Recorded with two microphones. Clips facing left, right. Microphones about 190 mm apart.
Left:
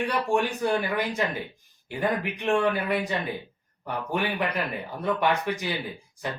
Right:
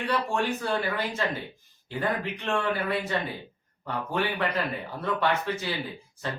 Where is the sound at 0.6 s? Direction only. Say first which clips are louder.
Left 3 dB; 15° left (ahead or behind).